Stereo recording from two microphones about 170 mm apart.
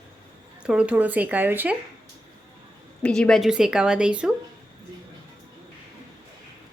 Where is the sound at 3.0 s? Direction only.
5° left (ahead or behind).